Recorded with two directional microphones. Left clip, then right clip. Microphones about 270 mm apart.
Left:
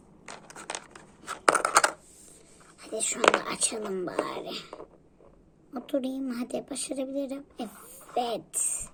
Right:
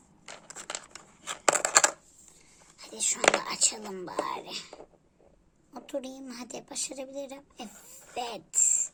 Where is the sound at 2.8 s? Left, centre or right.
Centre.